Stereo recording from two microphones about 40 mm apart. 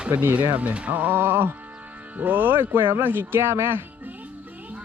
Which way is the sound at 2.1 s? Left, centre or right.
Right.